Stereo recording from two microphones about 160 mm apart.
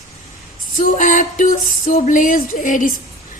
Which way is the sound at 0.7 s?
55° left (ahead or behind).